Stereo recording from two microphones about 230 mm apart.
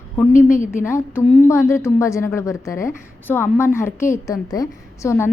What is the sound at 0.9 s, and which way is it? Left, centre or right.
A woman's voice, centre.